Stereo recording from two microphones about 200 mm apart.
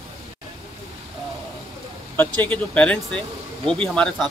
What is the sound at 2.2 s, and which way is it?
Speech, 5° left (ahead or behind).